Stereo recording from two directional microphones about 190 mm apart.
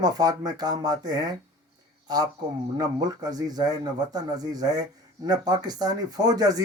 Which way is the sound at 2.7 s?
20° right (ahead or behind).